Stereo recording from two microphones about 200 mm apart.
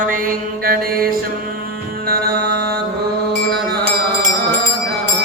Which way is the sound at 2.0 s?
50° right (ahead or behind).